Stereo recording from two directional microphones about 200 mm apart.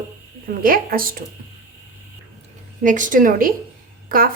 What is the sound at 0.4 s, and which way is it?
Speech, 45° right (ahead or behind).